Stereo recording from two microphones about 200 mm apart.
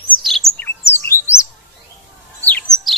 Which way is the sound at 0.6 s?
10° left (ahead or behind).